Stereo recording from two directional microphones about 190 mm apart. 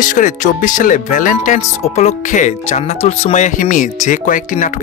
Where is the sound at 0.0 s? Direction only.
45° left (ahead or behind).